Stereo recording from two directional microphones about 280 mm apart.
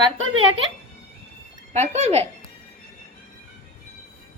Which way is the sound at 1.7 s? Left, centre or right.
Right.